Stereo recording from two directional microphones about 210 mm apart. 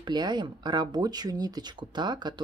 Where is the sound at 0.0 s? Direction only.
20° right (ahead or behind).